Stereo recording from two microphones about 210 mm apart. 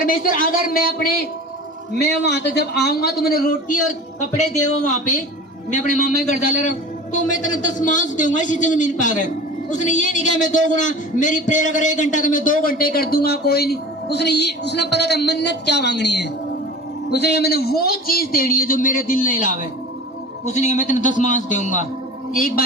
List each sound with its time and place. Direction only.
0.0 s a man's voice: 40° left (ahead or behind)
4.9 s a man's voice: 35° left (ahead or behind)